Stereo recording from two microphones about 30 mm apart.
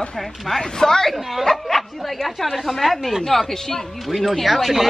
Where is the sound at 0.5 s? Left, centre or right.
Centre.